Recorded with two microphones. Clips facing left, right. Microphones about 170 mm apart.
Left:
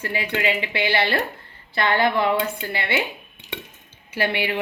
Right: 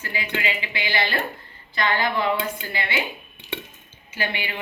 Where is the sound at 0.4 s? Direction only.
60° left (ahead or behind).